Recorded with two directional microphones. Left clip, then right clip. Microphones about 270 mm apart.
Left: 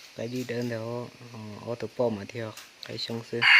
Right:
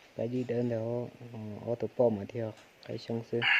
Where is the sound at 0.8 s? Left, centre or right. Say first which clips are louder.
Even; left.